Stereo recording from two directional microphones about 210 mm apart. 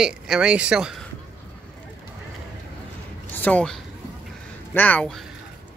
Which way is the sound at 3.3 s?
5° left (ahead or behind).